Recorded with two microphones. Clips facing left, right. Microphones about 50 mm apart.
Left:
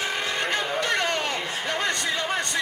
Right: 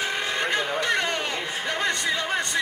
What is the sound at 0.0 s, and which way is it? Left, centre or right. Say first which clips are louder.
Vehicle: right 1 dB; centre.